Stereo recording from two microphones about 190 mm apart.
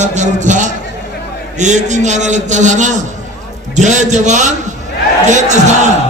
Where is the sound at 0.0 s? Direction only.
40° right (ahead or behind).